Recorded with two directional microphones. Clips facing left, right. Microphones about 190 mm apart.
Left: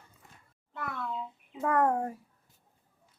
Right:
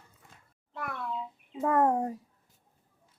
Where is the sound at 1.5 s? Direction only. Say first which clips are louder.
Right 2 dB; 20° right (ahead or behind).